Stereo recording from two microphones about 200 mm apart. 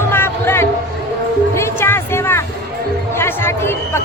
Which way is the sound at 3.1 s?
10° left (ahead or behind).